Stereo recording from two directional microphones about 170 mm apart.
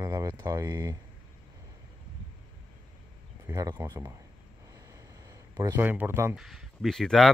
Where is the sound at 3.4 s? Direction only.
20° right (ahead or behind).